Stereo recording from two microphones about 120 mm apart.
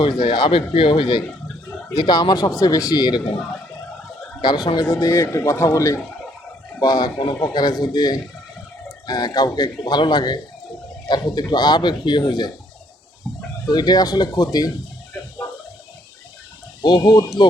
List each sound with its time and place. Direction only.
0.0 s speech: 40° left (ahead or behind)
1.9 s speech: 35° left (ahead or behind)
4.6 s speech: 35° left (ahead or behind)
4.9 s a man's voice: 25° left (ahead or behind)
13.7 s speech: 35° left (ahead or behind)
16.8 s speech: 40° left (ahead or behind)